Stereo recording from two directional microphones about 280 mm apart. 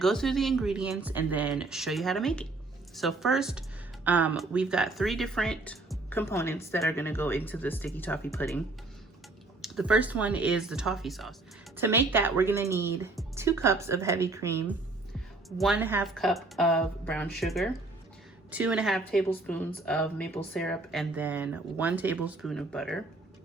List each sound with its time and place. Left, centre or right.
0.0 s speech: centre